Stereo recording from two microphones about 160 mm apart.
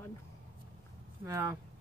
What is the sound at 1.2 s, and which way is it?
Speech, 20° right (ahead or behind).